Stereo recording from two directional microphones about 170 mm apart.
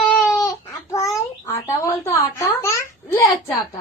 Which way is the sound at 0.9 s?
20° left (ahead or behind).